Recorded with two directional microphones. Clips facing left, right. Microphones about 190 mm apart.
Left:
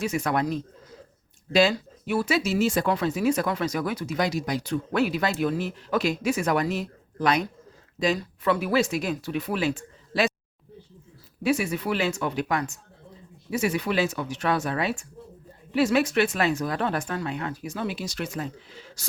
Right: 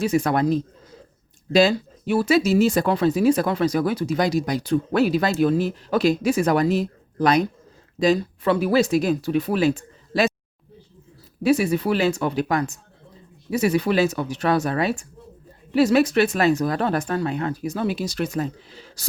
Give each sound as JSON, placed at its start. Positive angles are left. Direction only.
{"t": 0.0, "sound": "speech", "side_deg": -35}
{"t": 11.4, "sound": "speech", "side_deg": -35}